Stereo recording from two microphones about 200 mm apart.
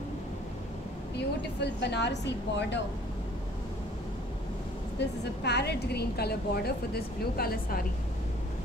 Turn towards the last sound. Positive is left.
turn(degrees=50)  # may be behind; listen again after turning